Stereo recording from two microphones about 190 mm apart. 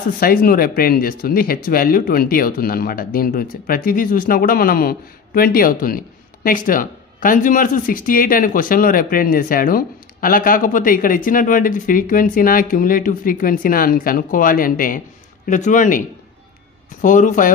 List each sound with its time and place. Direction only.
0.2 s speech: 50° left (ahead or behind)
17.0 s speech: 45° left (ahead or behind)